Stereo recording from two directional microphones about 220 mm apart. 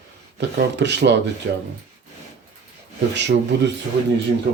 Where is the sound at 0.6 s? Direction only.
55° right (ahead or behind).